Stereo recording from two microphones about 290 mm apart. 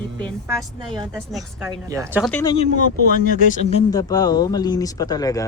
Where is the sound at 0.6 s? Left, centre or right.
Centre.